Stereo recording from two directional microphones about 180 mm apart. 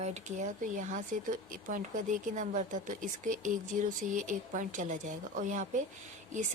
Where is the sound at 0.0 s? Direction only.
40° right (ahead or behind).